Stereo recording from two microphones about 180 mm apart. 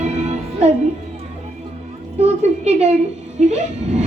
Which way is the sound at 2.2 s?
40° right (ahead or behind).